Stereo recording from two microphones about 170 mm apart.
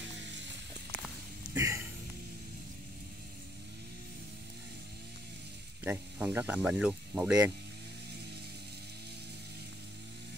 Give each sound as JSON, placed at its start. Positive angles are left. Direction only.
{"t": 1.5, "sound": "music", "side_deg": -15}
{"t": 5.9, "sound": "speech", "side_deg": -10}